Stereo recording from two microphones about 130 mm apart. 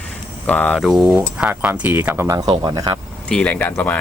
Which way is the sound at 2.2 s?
30° right (ahead or behind).